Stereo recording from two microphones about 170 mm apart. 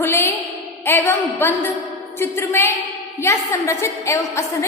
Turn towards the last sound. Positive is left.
turn(degrees=15)  # may be behind; listen again after turning